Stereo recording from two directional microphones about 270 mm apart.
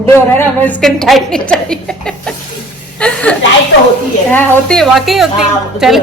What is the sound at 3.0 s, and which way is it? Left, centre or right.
Chuckle, centre.